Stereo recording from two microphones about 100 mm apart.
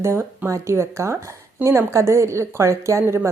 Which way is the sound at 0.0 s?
25° right (ahead or behind).